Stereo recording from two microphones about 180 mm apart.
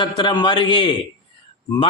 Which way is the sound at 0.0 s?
25° left (ahead or behind).